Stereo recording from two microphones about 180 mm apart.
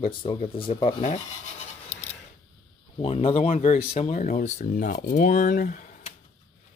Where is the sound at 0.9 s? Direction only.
40° left (ahead or behind).